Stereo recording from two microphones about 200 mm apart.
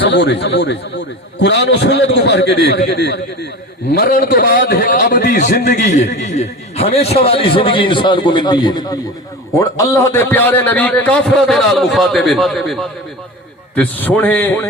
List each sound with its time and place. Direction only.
0.1 s a man's voice: 60° left (ahead or behind); by 14.7 s 10° left (ahead or behind)